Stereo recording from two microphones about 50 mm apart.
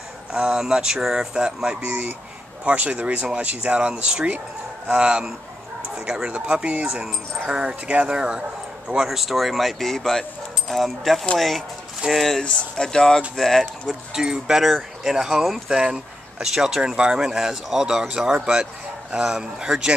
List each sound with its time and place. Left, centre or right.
0.3 s speech: centre
1.9 s speech: right; by 12.4 s centre
12.4 s speech: centre
13.4 s speech: centre
14.1 s speech: centre